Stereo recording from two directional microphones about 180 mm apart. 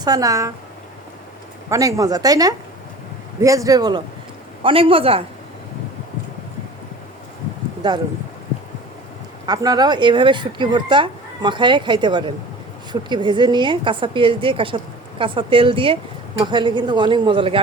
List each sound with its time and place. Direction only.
0.0 s speech: 20° right (ahead or behind)
1.7 s a man's voice: 20° right (ahead or behind)
9.5 s speech: 20° right (ahead or behind)